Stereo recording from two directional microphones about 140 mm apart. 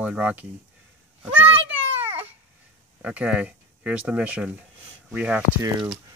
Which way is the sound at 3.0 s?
10° right (ahead or behind).